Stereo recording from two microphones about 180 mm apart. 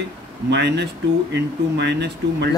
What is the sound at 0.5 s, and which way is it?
Speech, 70° right (ahead or behind).